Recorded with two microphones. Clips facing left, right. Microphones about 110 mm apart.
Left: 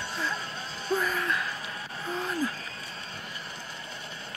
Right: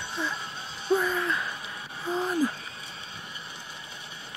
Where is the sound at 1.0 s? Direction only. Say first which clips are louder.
Right 1 dB; 25° right (ahead or behind).